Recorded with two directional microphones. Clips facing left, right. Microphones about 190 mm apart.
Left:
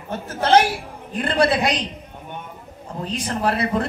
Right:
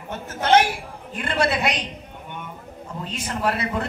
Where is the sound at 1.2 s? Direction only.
35° left (ahead or behind).